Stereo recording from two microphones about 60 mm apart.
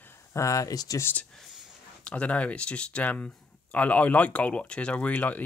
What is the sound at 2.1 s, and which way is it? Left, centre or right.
Speech, left.